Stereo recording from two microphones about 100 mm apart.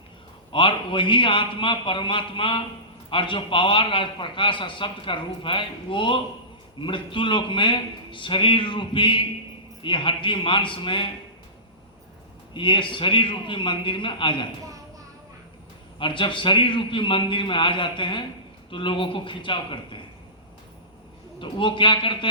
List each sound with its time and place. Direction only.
0.5 s a man's voice: 55° left (ahead or behind)
12.5 s a man's voice: 55° left (ahead or behind)
16.0 s a man's voice: 55° left (ahead or behind)
21.3 s a man's voice: 55° left (ahead or behind)